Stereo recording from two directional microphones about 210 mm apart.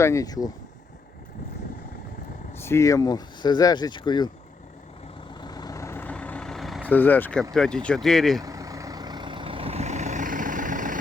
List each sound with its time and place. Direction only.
0.0 s speech: 15° left (ahead or behind)
2.5 s speech: 10° left (ahead or behind)
5.3 s vehicle: 20° left (ahead or behind)
7.5 s speech: 5° left (ahead or behind)
8.4 s vehicle: 15° right (ahead or behind); by 10.9 s 40° right (ahead or behind)